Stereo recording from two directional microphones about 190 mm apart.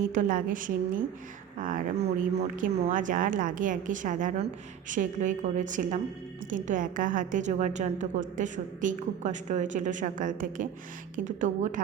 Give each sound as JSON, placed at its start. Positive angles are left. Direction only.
{"t": 0.1, "sound": "a woman's voice", "side_deg": -45}